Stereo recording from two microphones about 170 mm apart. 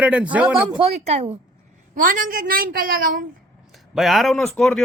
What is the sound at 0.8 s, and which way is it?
Speech, 35° right (ahead or behind).